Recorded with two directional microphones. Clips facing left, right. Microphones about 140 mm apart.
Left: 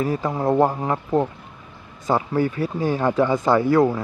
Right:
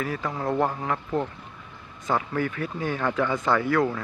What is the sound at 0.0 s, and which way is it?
Speech, 30° left (ahead or behind).